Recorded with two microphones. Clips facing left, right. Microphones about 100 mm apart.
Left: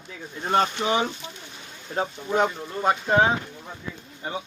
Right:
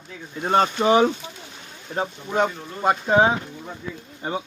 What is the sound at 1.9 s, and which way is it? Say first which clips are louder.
Speech: even; centre (ahead or behind).